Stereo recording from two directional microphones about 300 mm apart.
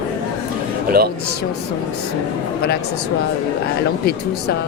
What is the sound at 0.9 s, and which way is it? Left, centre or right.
Speech, right.